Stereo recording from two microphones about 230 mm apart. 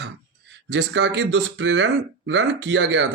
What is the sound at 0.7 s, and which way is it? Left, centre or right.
Speech, right.